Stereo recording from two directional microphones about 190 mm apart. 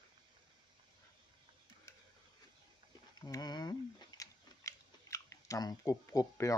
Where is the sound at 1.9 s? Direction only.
15° left (ahead or behind).